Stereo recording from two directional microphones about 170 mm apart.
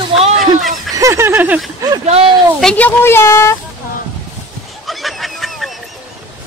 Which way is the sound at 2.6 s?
10° left (ahead or behind).